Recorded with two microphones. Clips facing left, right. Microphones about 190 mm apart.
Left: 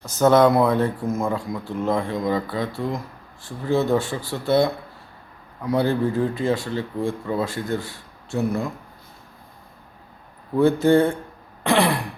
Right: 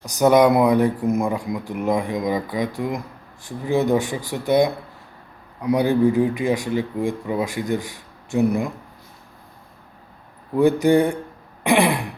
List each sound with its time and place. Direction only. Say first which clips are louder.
0.0 s speech: right 1 dB; 15° right (ahead or behind)
10.5 s speech: right 1 dB; 15° right (ahead or behind)